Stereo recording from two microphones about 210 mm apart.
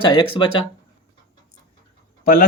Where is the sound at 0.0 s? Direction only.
20° left (ahead or behind).